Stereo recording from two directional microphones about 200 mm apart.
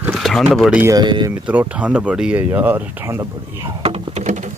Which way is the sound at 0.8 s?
15° right (ahead or behind).